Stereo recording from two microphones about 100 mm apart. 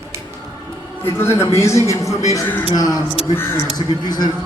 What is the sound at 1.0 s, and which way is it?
A man's voice, 25° left (ahead or behind).